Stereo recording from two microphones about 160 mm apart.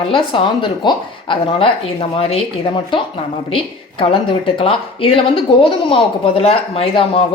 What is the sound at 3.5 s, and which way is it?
A woman's voice, 35° left (ahead or behind).